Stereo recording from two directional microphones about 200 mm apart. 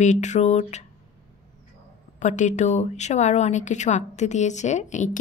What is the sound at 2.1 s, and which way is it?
A woman's voice, 35° left (ahead or behind).